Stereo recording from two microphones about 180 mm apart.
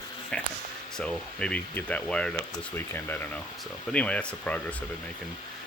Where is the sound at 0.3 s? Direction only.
5° left (ahead or behind).